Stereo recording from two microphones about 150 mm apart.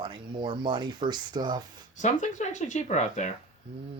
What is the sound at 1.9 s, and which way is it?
Speech, 55° left (ahead or behind).